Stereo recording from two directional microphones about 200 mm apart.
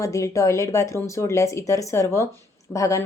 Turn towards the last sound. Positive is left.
turn(degrees=15)  # may be behind; listen again after turning